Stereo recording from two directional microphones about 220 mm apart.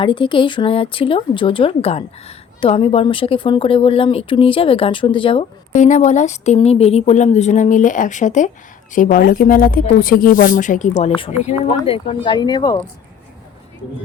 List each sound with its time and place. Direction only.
0.0 s speech: 20° left (ahead or behind)